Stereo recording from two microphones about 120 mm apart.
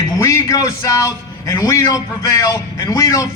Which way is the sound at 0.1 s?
25° left (ahead or behind).